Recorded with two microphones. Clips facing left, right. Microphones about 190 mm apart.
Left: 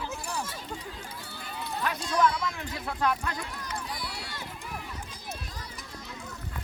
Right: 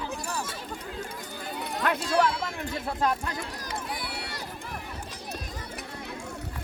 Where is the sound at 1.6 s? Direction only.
65° right (ahead or behind).